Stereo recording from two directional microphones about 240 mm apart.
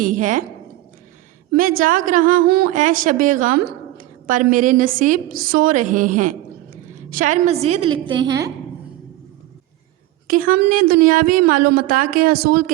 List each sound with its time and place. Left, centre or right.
0.0 s a woman's voice: right
1.5 s a woman's voice: right; by 8.5 s centre
10.2 s a woman's voice: right